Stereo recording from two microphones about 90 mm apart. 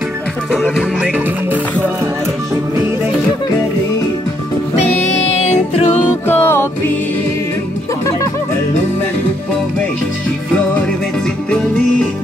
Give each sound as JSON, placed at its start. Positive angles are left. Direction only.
{"t": 0.5, "sound": "music", "side_deg": -5}
{"t": 6.2, "sound": "music", "side_deg": 25}
{"t": 11.5, "sound": "music", "side_deg": 10}